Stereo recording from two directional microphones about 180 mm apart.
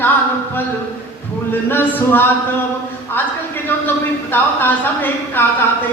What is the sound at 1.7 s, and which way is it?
Speech, 10° left (ahead or behind).